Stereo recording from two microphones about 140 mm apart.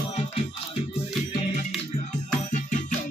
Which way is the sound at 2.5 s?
65° left (ahead or behind).